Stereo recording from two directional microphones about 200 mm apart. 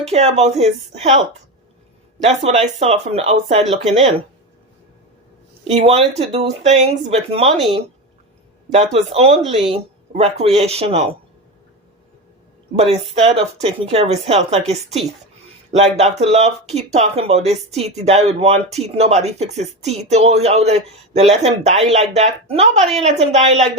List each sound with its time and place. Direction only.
0.0 s speech: 30° right (ahead or behind)
2.4 s speech: 30° right (ahead or behind)
5.6 s speech: 30° right (ahead or behind)
8.7 s speech: 30° right (ahead or behind)
12.7 s speech: 30° right (ahead or behind)